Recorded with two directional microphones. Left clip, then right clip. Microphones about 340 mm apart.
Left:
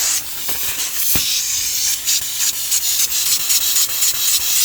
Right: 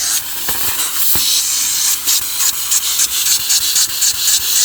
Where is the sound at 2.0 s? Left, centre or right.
Centre.